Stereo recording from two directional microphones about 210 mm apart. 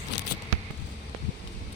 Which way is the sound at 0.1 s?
55° left (ahead or behind).